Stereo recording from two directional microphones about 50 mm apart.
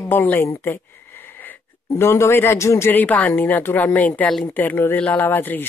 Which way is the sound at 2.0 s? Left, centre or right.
Left.